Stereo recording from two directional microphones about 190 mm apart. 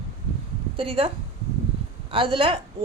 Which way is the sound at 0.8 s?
30° right (ahead or behind).